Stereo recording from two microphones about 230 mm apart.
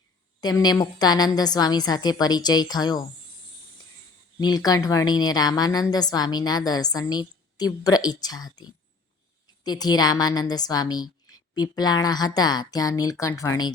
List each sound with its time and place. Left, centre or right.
0.4 s a woman's voice: centre
4.4 s a woman's voice: centre